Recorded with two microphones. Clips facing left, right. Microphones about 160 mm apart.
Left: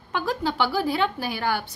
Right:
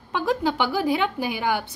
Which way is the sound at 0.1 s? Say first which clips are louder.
Right 3 dB; 20° right (ahead or behind).